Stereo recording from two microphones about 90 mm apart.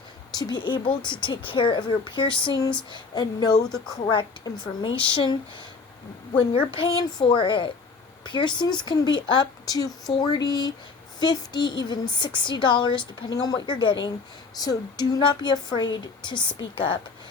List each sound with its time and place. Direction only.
0.3 s a woman's voice: 55° left (ahead or behind)
4.8 s a woman's voice: 65° left (ahead or behind)
6.5 s a woman's voice: 85° left; by 13.0 s 60° left (ahead or behind)
13.4 s a woman's voice: 50° left (ahead or behind)
14.6 s a woman's voice: 45° left (ahead or behind); by 17.0 s 65° left (ahead or behind)